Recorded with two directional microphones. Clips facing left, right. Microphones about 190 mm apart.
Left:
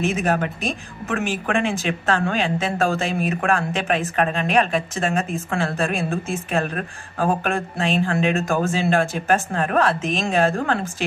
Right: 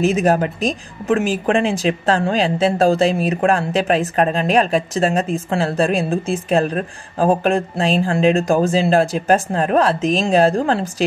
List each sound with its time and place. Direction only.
0.0 s speech: 35° right (ahead or behind)